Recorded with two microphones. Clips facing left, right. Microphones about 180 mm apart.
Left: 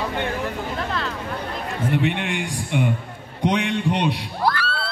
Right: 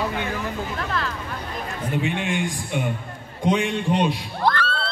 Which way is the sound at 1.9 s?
65° left (ahead or behind).